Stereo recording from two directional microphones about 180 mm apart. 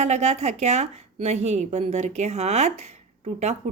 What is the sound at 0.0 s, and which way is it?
Speech, 40° right (ahead or behind).